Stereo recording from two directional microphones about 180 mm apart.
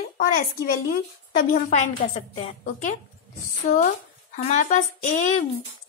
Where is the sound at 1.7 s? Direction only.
40° left (ahead or behind).